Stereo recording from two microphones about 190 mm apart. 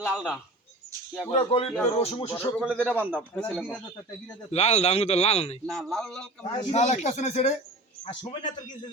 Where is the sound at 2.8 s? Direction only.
10° right (ahead or behind).